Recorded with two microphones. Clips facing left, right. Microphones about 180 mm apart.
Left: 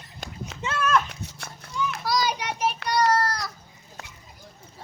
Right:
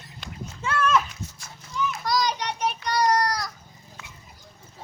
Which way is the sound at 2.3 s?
10° left (ahead or behind).